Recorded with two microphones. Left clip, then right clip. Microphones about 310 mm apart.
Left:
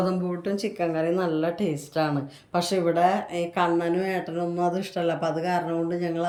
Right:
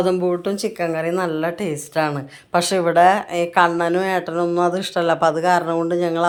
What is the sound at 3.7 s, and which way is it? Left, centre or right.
Speech, right.